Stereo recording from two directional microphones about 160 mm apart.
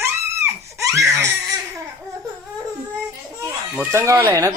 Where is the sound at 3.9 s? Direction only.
15° right (ahead or behind).